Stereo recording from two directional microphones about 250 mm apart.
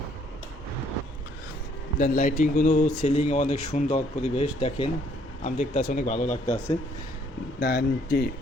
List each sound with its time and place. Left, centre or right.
2.0 s speech: left
7.6 s speech: left